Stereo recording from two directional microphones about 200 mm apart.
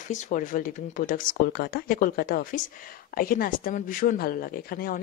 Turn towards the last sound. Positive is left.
turn(degrees=45)  # may be behind; listen again after turning